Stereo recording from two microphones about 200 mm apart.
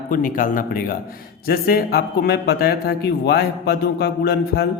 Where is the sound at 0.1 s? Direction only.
45° left (ahead or behind).